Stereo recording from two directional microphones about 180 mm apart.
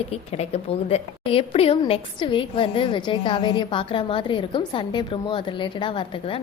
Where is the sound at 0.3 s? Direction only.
35° left (ahead or behind).